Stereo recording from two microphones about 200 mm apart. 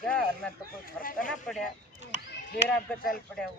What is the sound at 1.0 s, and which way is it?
Speech, 45° left (ahead or behind).